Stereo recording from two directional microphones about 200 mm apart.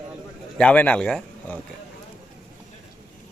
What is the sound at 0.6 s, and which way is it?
A man's voice, 5° left (ahead or behind).